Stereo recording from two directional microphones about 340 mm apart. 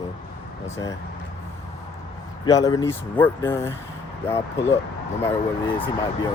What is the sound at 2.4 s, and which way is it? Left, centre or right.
Speech, centre.